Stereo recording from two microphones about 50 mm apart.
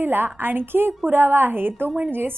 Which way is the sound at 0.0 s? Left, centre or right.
Right.